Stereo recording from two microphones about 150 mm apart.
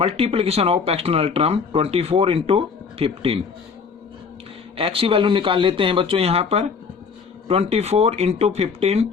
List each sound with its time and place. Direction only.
0.0 s speech: 40° right (ahead or behind)
4.8 s speech: 35° right (ahead or behind)